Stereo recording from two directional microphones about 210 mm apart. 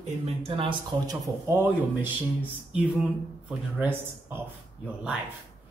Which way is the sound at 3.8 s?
10° right (ahead or behind).